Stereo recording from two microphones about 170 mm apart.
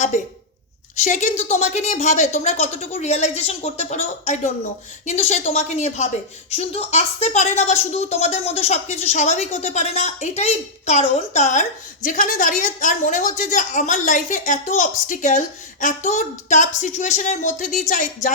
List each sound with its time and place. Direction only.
0.9 s a woman's voice: 45° left (ahead or behind)